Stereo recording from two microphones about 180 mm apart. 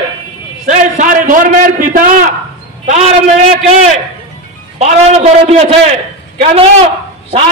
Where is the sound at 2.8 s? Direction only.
40° right (ahead or behind).